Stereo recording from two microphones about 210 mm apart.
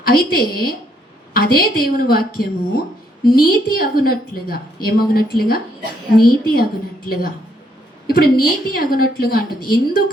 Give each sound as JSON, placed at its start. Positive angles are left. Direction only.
{"t": 0.0, "sound": "a woman's voice", "side_deg": 45}